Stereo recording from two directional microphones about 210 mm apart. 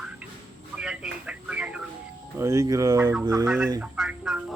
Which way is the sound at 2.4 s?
15° right (ahead or behind).